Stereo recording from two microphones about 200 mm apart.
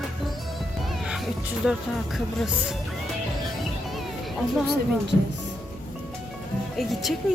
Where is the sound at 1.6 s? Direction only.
Centre (ahead or behind).